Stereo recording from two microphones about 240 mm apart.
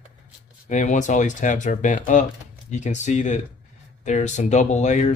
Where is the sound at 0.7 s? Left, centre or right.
Left.